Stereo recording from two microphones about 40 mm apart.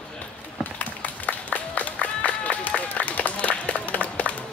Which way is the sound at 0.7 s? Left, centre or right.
Left.